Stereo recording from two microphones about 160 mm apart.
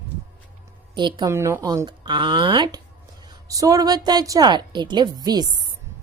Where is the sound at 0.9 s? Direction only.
30° right (ahead or behind).